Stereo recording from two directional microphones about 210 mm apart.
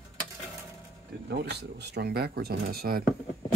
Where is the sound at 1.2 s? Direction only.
50° right (ahead or behind).